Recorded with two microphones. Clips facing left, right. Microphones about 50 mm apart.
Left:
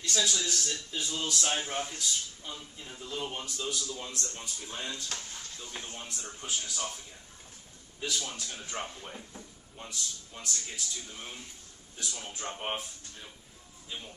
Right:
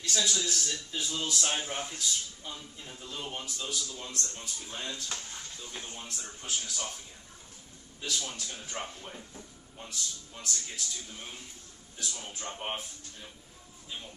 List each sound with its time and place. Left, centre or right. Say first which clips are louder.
0.0 s speech: even; centre
8.0 s speech: left 1 dB; centre